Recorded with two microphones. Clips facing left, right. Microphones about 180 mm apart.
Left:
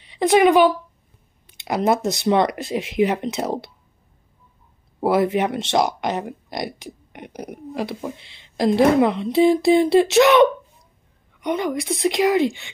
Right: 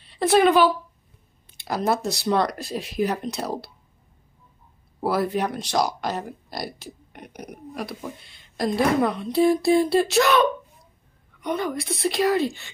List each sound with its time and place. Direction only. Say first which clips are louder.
0.0 s a woman's voice: left 3 dB; 15° left (ahead or behind)
5.0 s speech: left 5 dB; 20° left (ahead or behind)
8.2 s speech: left 3 dB; 90° left
8.5 s speech: left 6 dB; 25° left (ahead or behind)